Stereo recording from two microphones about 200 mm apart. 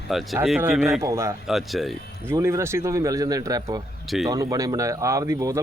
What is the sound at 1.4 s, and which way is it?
Speech, centre (ahead or behind).